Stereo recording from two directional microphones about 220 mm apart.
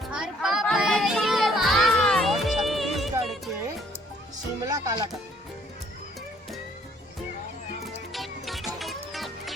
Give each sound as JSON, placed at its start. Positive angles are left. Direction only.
{"t": 0.0, "sound": "children playing", "side_deg": 0}
{"t": 4.6, "sound": "music", "side_deg": -15}
{"t": 8.1, "sound": "music", "side_deg": 0}